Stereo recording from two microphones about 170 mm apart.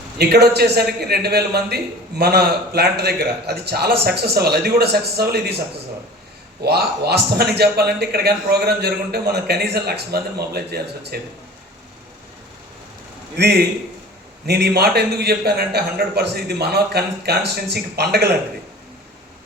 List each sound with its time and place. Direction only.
0.2 s a man's voice: 75° right (ahead or behind)
6.7 s a man's voice: 70° right (ahead or behind)
13.3 s a man's voice: 70° right (ahead or behind)